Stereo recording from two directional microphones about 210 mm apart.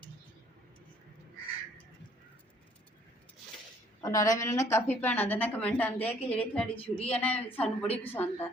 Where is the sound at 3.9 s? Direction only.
15° left (ahead or behind).